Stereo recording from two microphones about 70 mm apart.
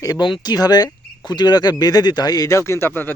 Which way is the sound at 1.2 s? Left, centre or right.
Left.